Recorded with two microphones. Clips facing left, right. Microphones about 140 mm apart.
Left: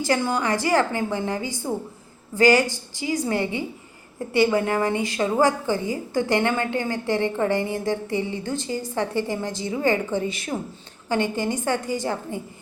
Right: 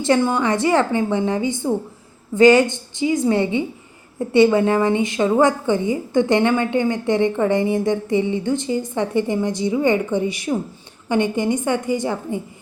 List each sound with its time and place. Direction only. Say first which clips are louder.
0.0 s a woman's voice: right 5 dB; 25° right (ahead or behind)